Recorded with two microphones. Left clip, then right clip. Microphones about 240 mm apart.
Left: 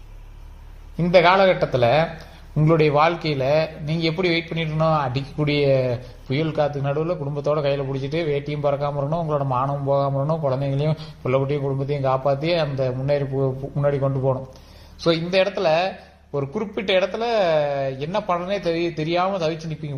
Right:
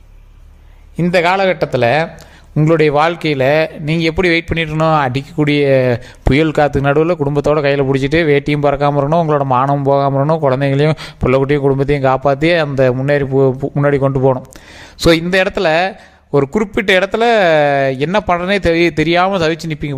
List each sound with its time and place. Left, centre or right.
0.9 s a man's voice: right